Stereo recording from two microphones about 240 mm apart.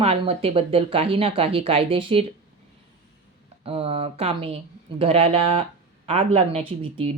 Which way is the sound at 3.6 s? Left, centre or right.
Right.